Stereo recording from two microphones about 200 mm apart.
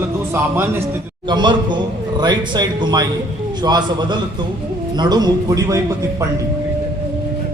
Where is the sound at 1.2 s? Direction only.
20° right (ahead or behind).